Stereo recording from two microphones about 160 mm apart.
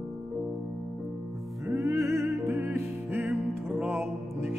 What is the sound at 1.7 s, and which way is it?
Music, 20° right (ahead or behind).